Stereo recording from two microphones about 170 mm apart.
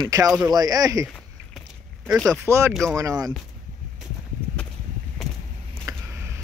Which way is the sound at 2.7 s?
Centre (ahead or behind).